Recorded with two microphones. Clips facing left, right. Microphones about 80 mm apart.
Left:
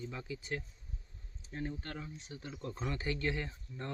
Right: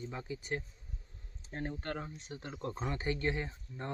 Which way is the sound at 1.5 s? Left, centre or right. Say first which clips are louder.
Right 2 dB; right.